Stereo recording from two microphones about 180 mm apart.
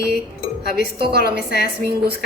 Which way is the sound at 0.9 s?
65° right (ahead or behind).